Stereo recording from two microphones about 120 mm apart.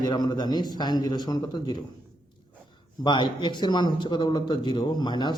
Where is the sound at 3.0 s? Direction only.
40° left (ahead or behind).